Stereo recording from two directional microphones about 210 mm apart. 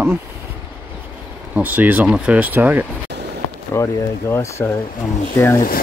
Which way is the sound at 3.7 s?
15° left (ahead or behind).